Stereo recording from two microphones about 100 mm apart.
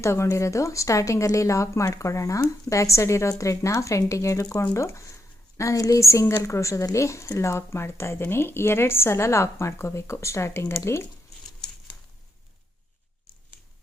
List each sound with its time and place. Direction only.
0.0 s a woman's voice: 30° left (ahead or behind)